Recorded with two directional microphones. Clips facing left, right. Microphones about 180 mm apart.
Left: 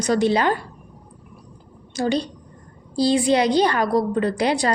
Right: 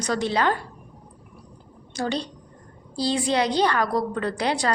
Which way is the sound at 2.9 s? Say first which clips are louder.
Left 5 dB; 15° left (ahead or behind).